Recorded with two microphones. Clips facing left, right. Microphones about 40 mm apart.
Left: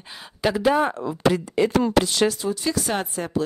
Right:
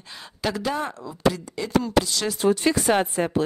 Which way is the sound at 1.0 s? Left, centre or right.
Left.